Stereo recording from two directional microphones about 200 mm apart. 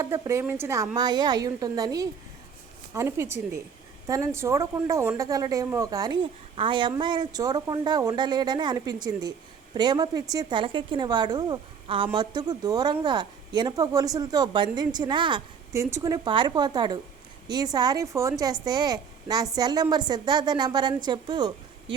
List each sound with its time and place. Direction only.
0.0 s speech: 15° right (ahead or behind)